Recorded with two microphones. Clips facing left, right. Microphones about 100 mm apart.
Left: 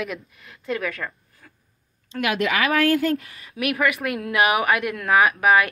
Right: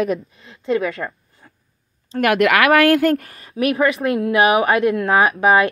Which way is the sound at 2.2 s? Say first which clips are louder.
Right 7 dB; 60° right (ahead or behind).